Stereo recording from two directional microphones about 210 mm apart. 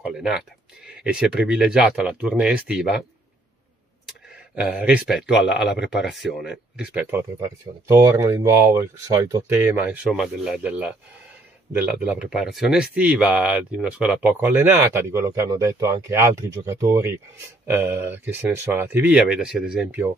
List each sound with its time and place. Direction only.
0.0 s speech: 5° right (ahead or behind)
4.6 s speech: 5° right (ahead or behind)